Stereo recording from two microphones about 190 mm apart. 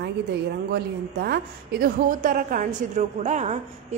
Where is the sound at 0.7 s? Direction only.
55° right (ahead or behind).